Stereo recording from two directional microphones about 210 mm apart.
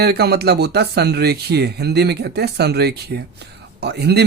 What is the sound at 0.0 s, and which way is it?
Speech, 50° right (ahead or behind).